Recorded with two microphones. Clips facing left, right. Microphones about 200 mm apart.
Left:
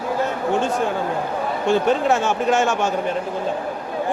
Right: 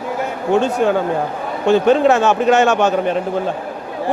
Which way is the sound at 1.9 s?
70° right (ahead or behind).